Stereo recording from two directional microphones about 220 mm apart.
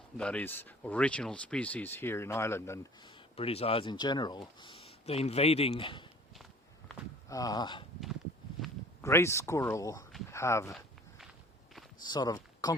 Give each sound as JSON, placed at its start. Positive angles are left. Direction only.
{"t": 0.2, "sound": "speech", "side_deg": 5}
{"t": 3.3, "sound": "speech", "side_deg": 25}
{"t": 6.3, "sound": "walk", "side_deg": 0}
{"t": 7.3, "sound": "speech", "side_deg": 15}
{"t": 9.0, "sound": "speech", "side_deg": 10}
{"t": 12.0, "sound": "speech", "side_deg": 20}